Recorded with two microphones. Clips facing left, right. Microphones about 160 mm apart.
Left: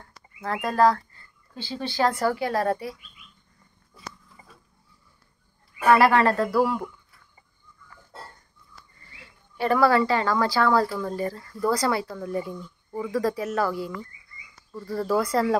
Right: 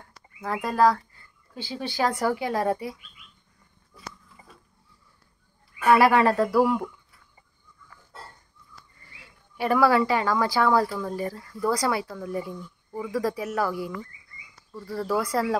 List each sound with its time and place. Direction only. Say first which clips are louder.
0.4 s speech: left 1 dB; 10° right (ahead or behind)
5.9 s speech: even; 10° right (ahead or behind)
9.2 s speech: left 1 dB; 10° right (ahead or behind)
14.7 s speech: left 2 dB; 5° right (ahead or behind)